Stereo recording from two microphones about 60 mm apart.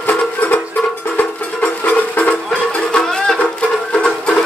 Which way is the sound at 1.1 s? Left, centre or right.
Left.